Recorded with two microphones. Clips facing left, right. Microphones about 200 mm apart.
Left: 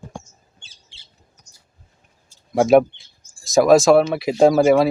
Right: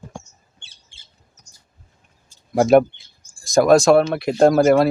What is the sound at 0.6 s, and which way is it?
Squawk, 55° right (ahead or behind).